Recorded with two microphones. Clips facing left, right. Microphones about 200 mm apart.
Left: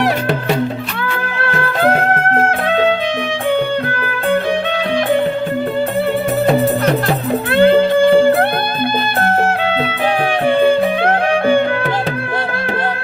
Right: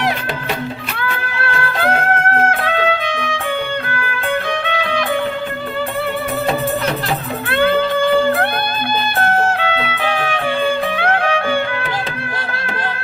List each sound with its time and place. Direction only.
2.5 s music: 35° left (ahead or behind)
7.6 s music: 30° left (ahead or behind)
9.6 s music: 40° left (ahead or behind)